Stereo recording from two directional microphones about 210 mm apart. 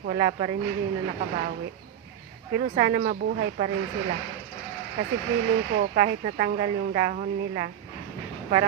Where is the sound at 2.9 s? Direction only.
40° right (ahead or behind).